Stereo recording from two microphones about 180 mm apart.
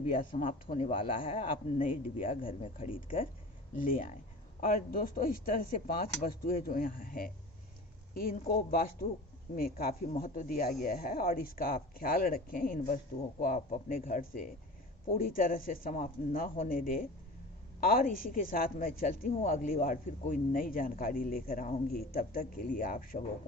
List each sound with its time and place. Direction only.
0.2 s speech: 45° left (ahead or behind); by 1.5 s 30° left (ahead or behind)
1.8 s speech: 50° left (ahead or behind)
2.3 s speech: 30° left (ahead or behind)
3.8 s a woman's voice: 50° left (ahead or behind)